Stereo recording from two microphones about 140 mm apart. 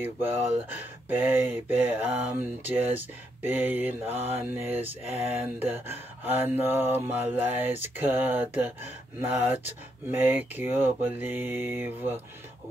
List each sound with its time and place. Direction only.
1.0 s mantra: 15° right (ahead or behind)